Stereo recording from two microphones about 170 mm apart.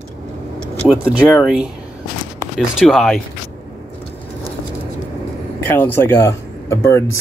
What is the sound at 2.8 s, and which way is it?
Speech, centre (ahead or behind).